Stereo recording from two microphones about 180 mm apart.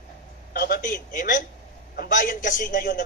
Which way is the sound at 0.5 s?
55° left (ahead or behind).